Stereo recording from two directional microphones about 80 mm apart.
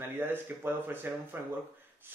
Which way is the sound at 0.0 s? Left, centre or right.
Right.